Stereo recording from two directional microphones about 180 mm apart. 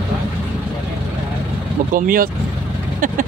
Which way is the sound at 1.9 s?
50° right (ahead or behind).